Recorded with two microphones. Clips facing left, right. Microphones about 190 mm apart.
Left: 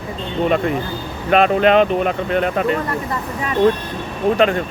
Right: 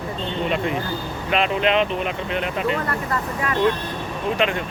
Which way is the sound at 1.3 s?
50° left (ahead or behind).